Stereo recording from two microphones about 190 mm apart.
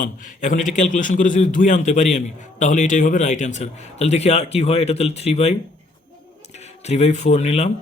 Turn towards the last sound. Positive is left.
turn(degrees=35)  # may be behind; listen again after turning